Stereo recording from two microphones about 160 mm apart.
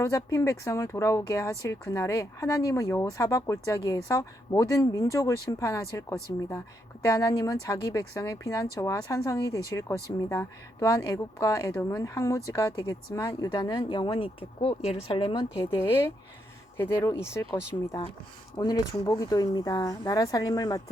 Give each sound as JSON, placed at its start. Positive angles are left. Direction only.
{"t": 0.0, "sound": "speech", "side_deg": 20}
{"t": 16.7, "sound": "speech", "side_deg": 15}